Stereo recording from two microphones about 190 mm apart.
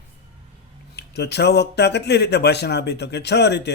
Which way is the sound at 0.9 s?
60° left (ahead or behind).